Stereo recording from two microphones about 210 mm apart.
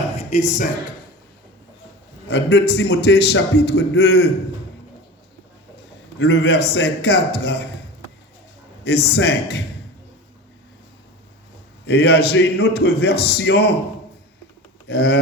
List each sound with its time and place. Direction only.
0.2 s speech: 35° left (ahead or behind)
2.3 s a man's voice: 55° left (ahead or behind)
6.1 s a man's voice: 55° left (ahead or behind)
8.8 s a man's voice: 50° left (ahead or behind)
11.9 s a man's voice: 50° left (ahead or behind)
14.8 s a man's voice: 50° left (ahead or behind)